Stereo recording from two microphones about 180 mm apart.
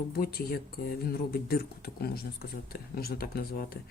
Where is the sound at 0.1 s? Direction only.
55° left (ahead or behind).